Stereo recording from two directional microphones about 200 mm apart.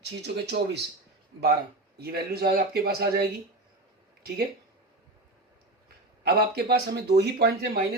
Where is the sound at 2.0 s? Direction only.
50° right (ahead or behind).